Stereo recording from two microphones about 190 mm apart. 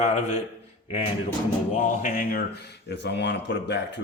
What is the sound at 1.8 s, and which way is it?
Speech, 45° left (ahead or behind).